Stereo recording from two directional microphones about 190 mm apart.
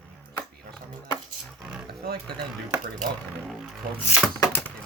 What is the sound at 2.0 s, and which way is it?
Speech, 55° right (ahead or behind).